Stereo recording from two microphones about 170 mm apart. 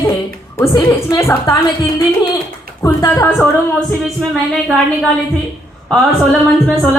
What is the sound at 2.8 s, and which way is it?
Speech, 20° left (ahead or behind).